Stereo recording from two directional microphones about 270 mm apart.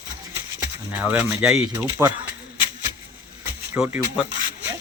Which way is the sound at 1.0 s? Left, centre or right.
Centre.